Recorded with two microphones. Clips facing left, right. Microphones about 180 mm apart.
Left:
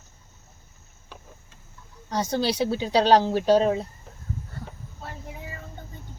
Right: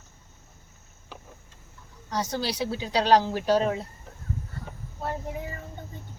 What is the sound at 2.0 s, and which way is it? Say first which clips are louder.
Speech: left 4 dB; 25° left (ahead or behind).